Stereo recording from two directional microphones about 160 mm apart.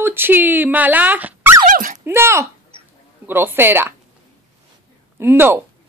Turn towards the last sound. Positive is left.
turn(degrees=-15)  # may be behind; listen again after turning